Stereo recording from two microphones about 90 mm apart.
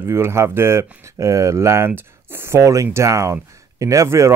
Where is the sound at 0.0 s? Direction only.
30° right (ahead or behind).